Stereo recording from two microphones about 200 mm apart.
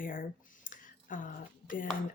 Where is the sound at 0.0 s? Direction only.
45° left (ahead or behind).